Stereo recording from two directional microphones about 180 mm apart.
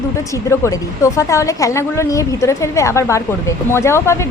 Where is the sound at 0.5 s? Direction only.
15° left (ahead or behind).